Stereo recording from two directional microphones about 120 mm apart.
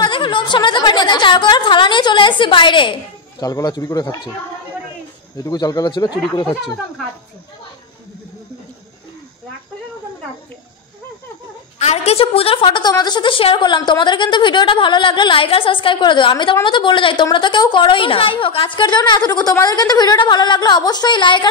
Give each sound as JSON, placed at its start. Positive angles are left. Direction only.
{"t": 0.0, "sound": "a woman's voice", "side_deg": 45}
{"t": 5.4, "sound": "a woman's voice", "side_deg": 30}
{"t": 11.8, "sound": "a woman's voice", "side_deg": 60}